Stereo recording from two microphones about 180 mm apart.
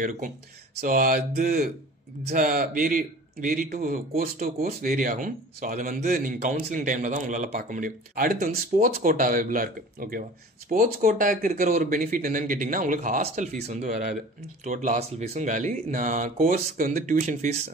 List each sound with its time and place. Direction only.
0.7 s speech: 50° right (ahead or behind)
13.9 s speech: 55° right (ahead or behind)